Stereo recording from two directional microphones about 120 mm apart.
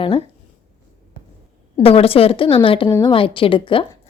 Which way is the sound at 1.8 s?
55° left (ahead or behind).